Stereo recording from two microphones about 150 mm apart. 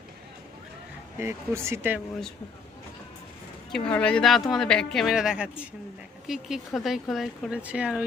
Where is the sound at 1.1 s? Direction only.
15° right (ahead or behind).